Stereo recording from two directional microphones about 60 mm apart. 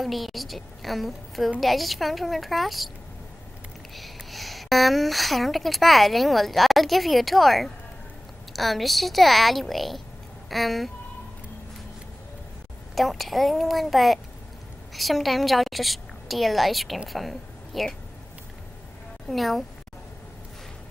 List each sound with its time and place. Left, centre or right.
0.0 s a woman's voice: centre
3.9 s a woman's voice: centre
12.9 s a woman's voice: centre
19.2 s a woman's voice: centre